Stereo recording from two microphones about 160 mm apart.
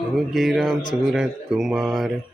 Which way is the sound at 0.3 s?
5° right (ahead or behind).